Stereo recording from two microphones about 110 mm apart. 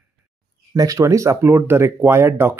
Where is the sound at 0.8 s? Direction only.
30° right (ahead or behind).